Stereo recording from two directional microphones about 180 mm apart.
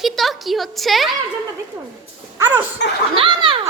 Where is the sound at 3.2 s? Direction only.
30° right (ahead or behind).